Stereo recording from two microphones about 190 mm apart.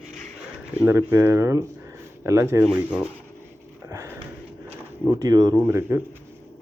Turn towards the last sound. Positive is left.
turn(degrees=-15)  # may be behind; listen again after turning